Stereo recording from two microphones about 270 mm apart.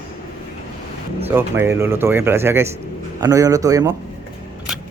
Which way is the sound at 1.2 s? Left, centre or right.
Centre.